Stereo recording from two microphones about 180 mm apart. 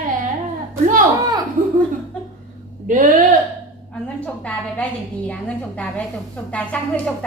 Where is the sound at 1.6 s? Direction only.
45° right (ahead or behind).